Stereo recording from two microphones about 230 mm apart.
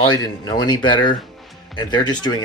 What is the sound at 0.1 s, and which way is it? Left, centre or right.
Speech, centre.